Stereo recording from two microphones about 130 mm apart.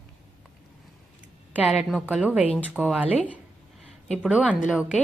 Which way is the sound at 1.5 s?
5° right (ahead or behind).